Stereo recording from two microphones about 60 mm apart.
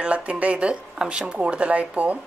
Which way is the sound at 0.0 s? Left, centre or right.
Right.